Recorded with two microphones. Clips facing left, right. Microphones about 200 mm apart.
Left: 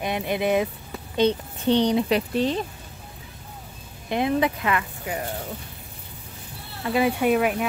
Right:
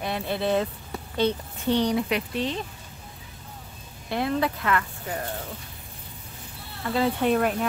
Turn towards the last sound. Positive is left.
turn(degrees=10)  # may be behind; listen again after turning